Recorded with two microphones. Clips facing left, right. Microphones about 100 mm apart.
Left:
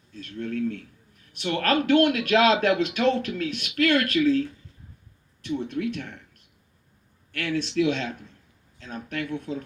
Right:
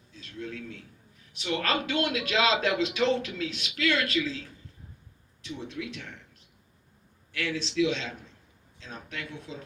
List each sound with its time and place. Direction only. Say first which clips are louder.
0.1 s a man's voice: left 7 dB; 55° left (ahead or behind)
7.3 s a man's voice: left 3 dB; 55° left (ahead or behind)